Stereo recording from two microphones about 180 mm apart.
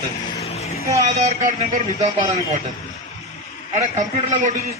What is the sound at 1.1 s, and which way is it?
A man's voice, 40° right (ahead or behind).